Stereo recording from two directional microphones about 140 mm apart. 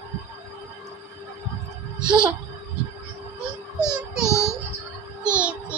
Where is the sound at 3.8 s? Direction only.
5° right (ahead or behind).